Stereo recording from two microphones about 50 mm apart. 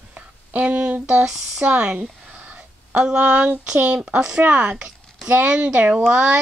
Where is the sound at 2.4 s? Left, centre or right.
Right.